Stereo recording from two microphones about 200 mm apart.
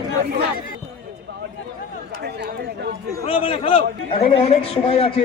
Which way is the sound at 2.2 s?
55° right (ahead or behind).